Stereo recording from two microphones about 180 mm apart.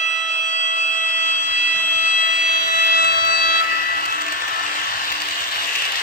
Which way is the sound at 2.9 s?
60° left (ahead or behind).